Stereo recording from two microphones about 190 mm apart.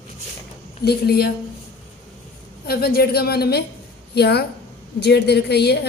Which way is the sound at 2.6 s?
55° left (ahead or behind).